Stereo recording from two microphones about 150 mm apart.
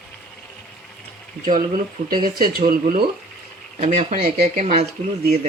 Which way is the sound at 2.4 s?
75° right (ahead or behind).